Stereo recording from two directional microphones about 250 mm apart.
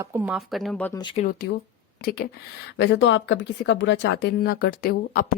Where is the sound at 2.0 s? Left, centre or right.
Left.